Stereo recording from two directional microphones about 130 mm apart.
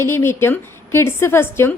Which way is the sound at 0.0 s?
20° left (ahead or behind).